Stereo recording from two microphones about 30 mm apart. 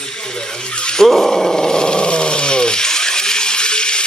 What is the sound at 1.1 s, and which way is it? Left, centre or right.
Roar, centre.